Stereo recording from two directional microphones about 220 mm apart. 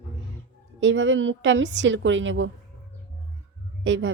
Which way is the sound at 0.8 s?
55° right (ahead or behind).